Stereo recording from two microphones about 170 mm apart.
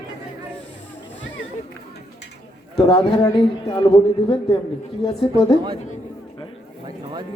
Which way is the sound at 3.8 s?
25° left (ahead or behind).